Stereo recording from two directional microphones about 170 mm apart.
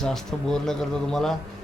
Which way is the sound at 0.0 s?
5° left (ahead or behind).